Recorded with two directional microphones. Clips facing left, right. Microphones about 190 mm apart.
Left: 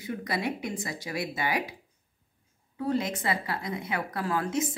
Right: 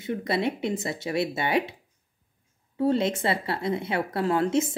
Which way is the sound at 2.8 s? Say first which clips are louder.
Right 5 dB; 30° right (ahead or behind).